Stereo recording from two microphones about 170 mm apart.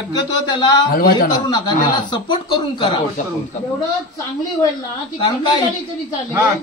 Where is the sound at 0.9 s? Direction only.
60° left (ahead or behind).